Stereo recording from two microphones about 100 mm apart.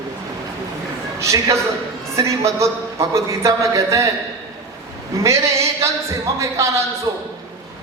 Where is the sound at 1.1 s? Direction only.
30° right (ahead or behind).